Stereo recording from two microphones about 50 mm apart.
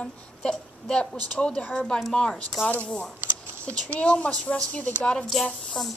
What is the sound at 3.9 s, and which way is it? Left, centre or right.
Speech, left.